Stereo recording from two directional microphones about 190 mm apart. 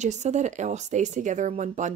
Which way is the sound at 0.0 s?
40° right (ahead or behind).